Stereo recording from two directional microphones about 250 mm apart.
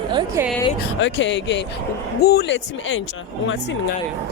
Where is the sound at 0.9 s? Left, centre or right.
Left.